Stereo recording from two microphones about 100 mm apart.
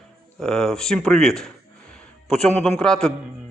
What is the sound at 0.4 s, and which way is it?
Speech, 5° left (ahead or behind).